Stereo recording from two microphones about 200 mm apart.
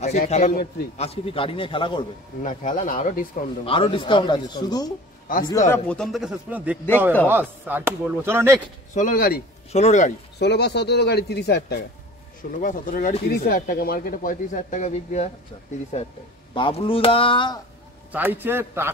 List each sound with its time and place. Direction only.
0.0 s speech: 35° left (ahead or behind)
0.9 s speech: 30° left (ahead or behind)
2.4 s speech: 40° left (ahead or behind)
3.6 s speech: 25° left (ahead or behind)
5.7 s a man's voice: 5° left (ahead or behind); by 8.5 s 10° right (ahead or behind)
8.9 s speech: 40° left (ahead or behind)
9.7 s speech: 35° left (ahead or behind)
10.4 s speech: 55° left (ahead or behind)
12.5 s speech: 40° left (ahead or behind); by 17.6 s 25° left (ahead or behind)
18.1 s speech: 10° right (ahead or behind)